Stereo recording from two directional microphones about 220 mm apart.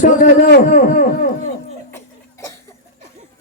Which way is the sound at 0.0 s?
35° left (ahead or behind).